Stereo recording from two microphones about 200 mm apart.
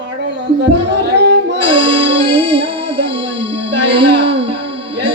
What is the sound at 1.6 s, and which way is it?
Music, 25° right (ahead or behind).